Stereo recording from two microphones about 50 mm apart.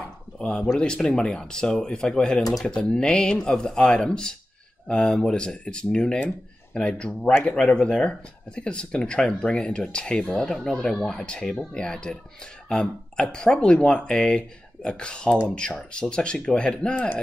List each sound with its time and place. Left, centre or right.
0.4 s speech: left